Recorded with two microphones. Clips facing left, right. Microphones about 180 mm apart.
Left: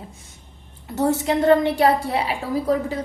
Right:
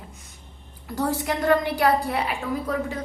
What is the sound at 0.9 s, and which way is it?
A woman's voice, 25° left (ahead or behind).